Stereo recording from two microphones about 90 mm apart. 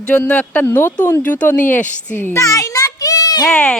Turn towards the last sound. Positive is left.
turn(degrees=10)  # may be behind; listen again after turning